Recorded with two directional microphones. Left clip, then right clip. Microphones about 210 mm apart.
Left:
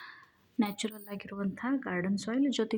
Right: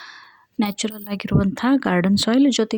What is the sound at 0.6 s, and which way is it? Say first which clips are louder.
A woman's voice: right 9 dB; 30° right (ahead or behind).